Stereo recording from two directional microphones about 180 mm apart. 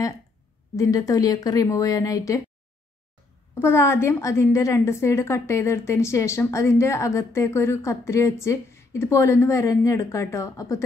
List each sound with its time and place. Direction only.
0.7 s speech: 20° left (ahead or behind)
3.5 s a woman's voice: 15° left (ahead or behind)